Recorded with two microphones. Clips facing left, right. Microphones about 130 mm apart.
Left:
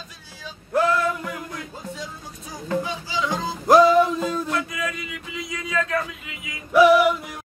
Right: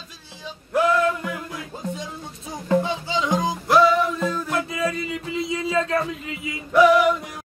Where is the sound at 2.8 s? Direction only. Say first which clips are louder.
Right 3 dB; 25° right (ahead or behind).